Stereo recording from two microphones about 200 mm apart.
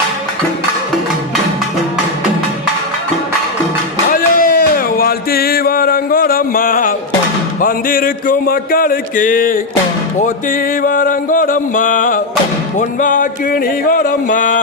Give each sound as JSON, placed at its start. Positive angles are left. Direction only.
{"t": 4.1, "sound": "a sound", "side_deg": 45}
{"t": 7.6, "sound": "music", "side_deg": 45}
{"t": 10.8, "sound": "music", "side_deg": 45}